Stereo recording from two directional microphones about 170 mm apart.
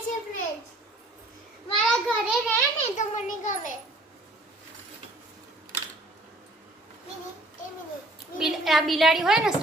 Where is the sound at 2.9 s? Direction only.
45° left (ahead or behind).